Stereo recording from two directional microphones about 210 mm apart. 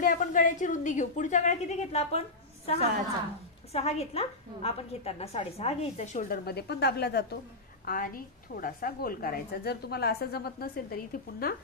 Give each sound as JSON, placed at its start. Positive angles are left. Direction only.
{"t": 0.0, "sound": "a woman's voice", "side_deg": 40}